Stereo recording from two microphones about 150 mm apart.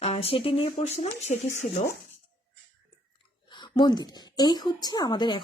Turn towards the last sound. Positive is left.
turn(degrees=30)  # may be behind; listen again after turning